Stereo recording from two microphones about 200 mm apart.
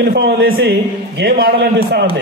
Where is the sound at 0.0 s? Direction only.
50° right (ahead or behind).